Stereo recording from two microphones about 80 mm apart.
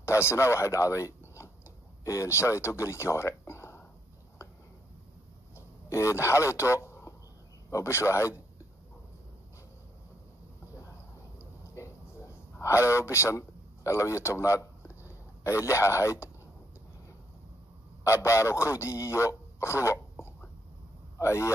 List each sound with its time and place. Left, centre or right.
0.0 s speech: left
5.9 s speech: left
11.3 s a sound: left
12.5 s speech: left
18.0 s a man's voice: left